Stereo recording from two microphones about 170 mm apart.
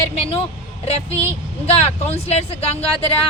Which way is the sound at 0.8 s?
40° left (ahead or behind).